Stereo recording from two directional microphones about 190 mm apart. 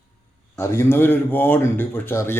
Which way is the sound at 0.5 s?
15° left (ahead or behind).